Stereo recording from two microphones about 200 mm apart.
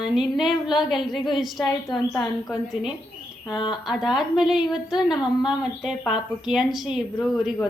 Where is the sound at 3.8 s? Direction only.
Centre (ahead or behind).